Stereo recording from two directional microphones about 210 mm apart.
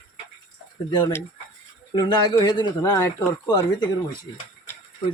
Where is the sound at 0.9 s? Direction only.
15° left (ahead or behind).